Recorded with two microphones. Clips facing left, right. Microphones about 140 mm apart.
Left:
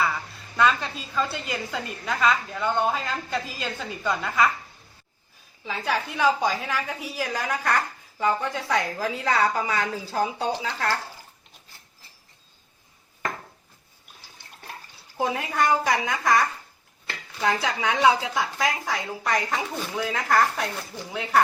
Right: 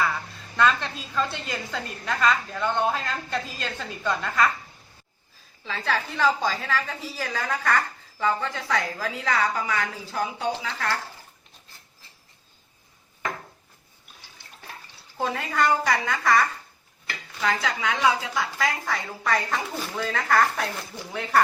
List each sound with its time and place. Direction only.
0.0 s a woman's voice: 5° left (ahead or behind)
5.6 s a woman's voice: 15° left (ahead or behind); by 10.5 s 30° left (ahead or behind)
15.2 s a woman's voice: 15° left (ahead or behind)
19.7 s a woman's voice: centre (ahead or behind)